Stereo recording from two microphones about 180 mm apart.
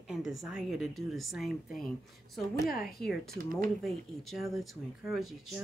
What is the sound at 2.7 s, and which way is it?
Speech, 55° left (ahead or behind).